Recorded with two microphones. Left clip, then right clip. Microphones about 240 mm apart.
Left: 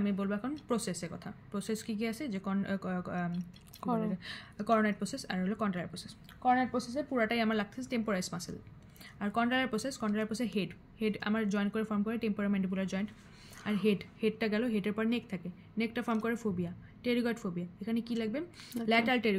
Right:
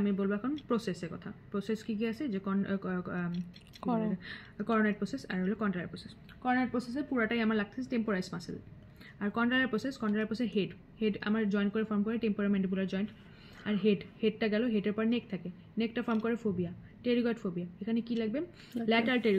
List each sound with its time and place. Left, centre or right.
0.0 s a woman's voice: left
3.8 s speech: centre
4.2 s a woman's voice: left